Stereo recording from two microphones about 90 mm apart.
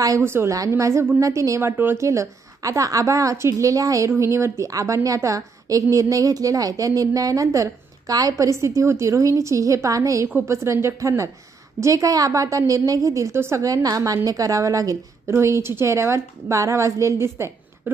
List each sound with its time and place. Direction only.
0.2 s a woman's voice: 30° right (ahead or behind)
1.8 s speech: 25° right (ahead or behind)
2.0 s a woman's voice: 35° right (ahead or behind)